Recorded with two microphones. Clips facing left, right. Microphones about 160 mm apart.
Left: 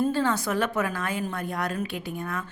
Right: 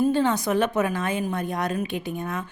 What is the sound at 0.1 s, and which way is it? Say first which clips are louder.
A woman's voice: right 3 dB; 20° right (ahead or behind).